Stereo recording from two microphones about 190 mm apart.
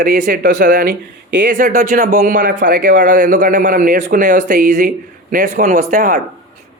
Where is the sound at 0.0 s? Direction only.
45° right (ahead or behind).